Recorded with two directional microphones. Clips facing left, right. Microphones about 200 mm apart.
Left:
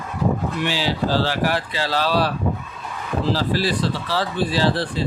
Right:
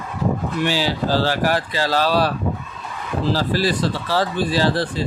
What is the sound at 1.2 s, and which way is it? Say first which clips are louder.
Speech: right 2 dB; 45° right (ahead or behind).